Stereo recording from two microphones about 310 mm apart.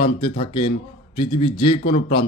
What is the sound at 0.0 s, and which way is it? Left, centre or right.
A man's voice, centre.